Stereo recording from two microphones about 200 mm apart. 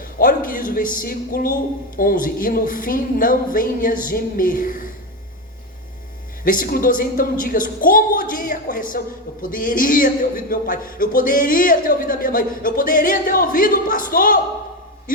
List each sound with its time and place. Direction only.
0.0 s a man's voice: 45° left (ahead or behind)
6.4 s a man's voice: 45° left (ahead or behind)